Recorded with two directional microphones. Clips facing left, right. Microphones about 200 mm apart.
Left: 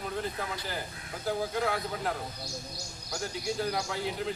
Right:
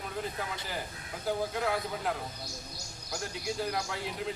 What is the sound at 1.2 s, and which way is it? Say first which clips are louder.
Speech: left 1 dB; centre (ahead or behind).